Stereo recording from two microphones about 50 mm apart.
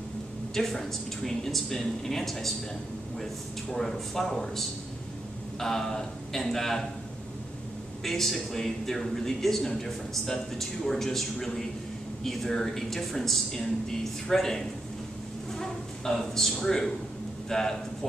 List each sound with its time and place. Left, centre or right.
0.6 s a man's voice: centre
3.7 s a man's voice: centre
8.0 s a man's voice: centre